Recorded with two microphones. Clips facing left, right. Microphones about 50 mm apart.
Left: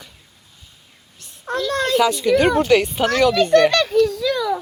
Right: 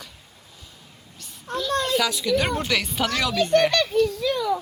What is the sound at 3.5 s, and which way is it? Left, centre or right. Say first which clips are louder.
Speech: left 5 dB; left.